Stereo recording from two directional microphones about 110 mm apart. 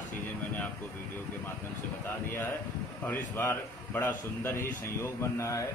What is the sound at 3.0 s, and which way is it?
A man's voice, 20° left (ahead or behind).